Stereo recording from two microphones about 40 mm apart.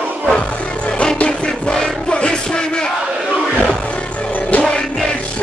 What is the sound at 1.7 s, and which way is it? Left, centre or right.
Music, left.